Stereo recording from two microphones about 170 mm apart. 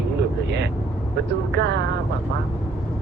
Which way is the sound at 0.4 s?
85° right.